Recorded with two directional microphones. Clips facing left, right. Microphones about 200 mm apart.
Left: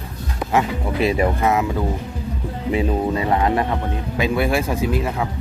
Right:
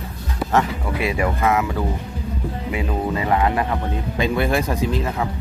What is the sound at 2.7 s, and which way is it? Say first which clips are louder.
Speech: left 4 dB; 30° left (ahead or behind).